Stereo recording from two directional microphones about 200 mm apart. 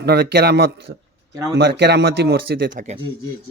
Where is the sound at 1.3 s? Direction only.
15° right (ahead or behind).